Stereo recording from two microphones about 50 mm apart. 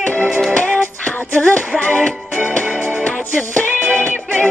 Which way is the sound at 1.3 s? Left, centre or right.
Left.